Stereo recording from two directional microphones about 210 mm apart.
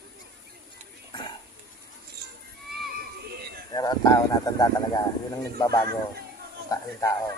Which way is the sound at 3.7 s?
20° left (ahead or behind).